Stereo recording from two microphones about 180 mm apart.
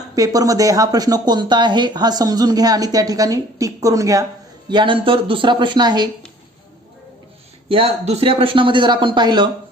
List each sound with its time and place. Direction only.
0.2 s speech: 20° right (ahead or behind)
7.7 s speech: 35° right (ahead or behind)